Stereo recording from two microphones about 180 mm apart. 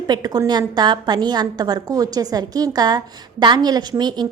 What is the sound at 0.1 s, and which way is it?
A woman's voice, 20° right (ahead or behind).